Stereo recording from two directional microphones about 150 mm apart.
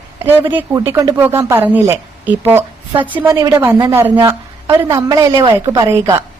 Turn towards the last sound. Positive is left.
turn(degrees=-20)  # may be behind; listen again after turning